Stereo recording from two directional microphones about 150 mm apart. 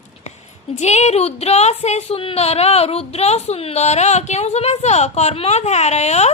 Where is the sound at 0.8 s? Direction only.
50° left (ahead or behind).